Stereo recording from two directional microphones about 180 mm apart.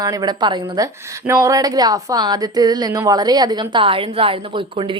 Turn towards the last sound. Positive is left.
turn(degrees=-30)  # may be behind; listen again after turning